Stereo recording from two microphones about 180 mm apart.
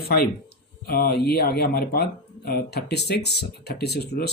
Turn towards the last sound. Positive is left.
turn(degrees=65)  # may be behind; listen again after turning